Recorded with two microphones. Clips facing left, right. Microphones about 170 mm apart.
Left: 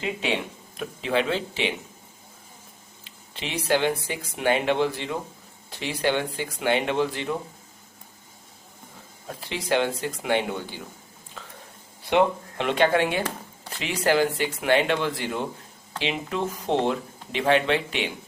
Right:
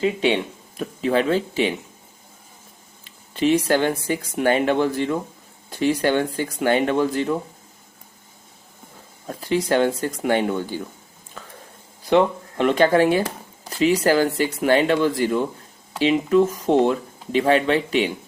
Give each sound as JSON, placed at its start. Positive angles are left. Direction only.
{"t": 0.0, "sound": "speech", "side_deg": -30}
{"t": 3.0, "sound": "speech", "side_deg": -45}
{"t": 9.2, "sound": "speech", "side_deg": -45}
{"t": 12.5, "sound": "speech", "side_deg": -40}